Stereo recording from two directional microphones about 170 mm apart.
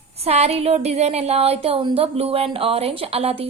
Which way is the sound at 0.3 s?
40° right (ahead or behind).